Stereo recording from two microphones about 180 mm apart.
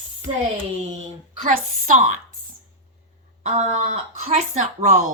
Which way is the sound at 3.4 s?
40° right (ahead or behind).